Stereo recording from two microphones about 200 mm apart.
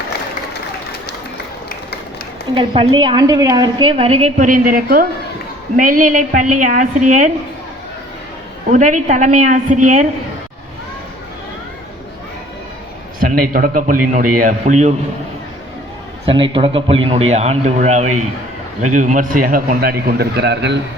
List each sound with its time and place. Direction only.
2.6 s a woman's voice: 25° right (ahead or behind); by 7.3 s 40° right (ahead or behind)
8.7 s a man's voice: 40° right (ahead or behind)
13.1 s a man's voice: 45° right (ahead or behind)
16.2 s a man's voice: 25° right (ahead or behind); by 20.7 s 60° right (ahead or behind)